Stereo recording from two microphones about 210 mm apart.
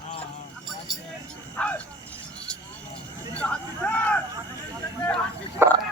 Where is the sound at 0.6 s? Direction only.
Centre (ahead or behind).